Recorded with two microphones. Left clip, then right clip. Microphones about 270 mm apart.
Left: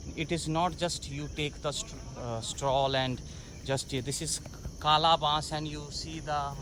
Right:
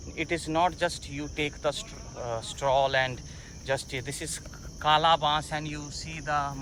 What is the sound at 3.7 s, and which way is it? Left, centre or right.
Speech, left.